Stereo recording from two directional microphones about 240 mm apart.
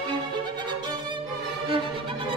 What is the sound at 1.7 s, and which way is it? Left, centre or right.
Music, right.